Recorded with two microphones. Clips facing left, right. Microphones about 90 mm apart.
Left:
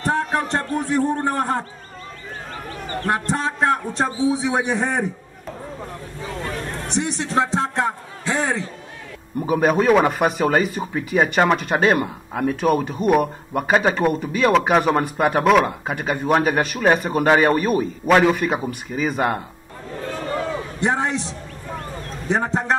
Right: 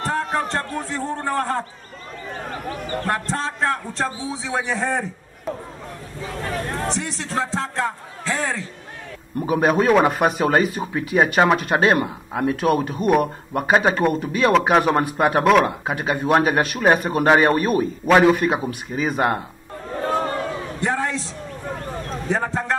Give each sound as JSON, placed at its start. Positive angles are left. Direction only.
{"t": 0.0, "sound": "a man's voice", "side_deg": 20}
{"t": 3.1, "sound": "a man's voice", "side_deg": 15}
{"t": 6.9, "sound": "a man's voice", "side_deg": 20}
{"t": 9.4, "sound": "speech", "side_deg": 0}
{"t": 20.8, "sound": "a man's voice", "side_deg": 20}
{"t": 22.3, "sound": "speech", "side_deg": 20}